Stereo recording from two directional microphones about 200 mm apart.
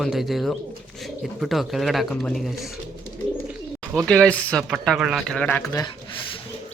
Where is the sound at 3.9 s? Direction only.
Centre (ahead or behind).